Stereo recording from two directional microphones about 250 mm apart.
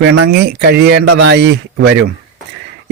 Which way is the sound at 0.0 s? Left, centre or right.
Right.